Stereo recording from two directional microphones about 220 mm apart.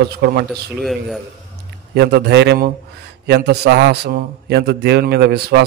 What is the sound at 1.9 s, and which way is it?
A man's voice, 50° right (ahead or behind).